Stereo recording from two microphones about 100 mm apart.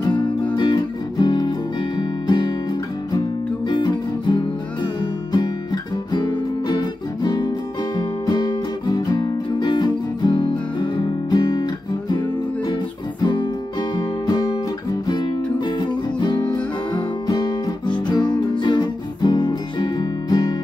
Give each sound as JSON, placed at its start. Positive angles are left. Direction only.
{"t": 0.6, "sound": "music", "side_deg": 45}
{"t": 6.8, "sound": "guitar", "side_deg": 45}
{"t": 13.2, "sound": "guitar", "side_deg": 50}
{"t": 13.9, "sound": "music", "side_deg": 40}